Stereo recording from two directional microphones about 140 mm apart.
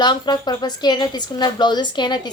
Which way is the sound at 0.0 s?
30° left (ahead or behind).